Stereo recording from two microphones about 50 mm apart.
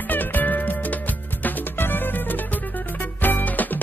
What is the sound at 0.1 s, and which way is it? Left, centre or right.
Music, left.